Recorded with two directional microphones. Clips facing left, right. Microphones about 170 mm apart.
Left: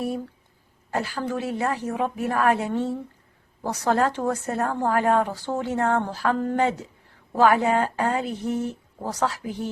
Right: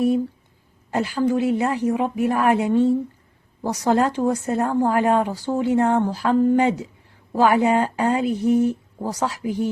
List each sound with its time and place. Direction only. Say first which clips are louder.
0.9 s a woman's voice: right 6 dB; 20° right (ahead or behind)